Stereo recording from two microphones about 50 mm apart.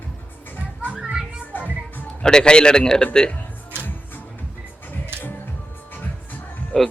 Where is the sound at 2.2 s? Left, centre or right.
Centre.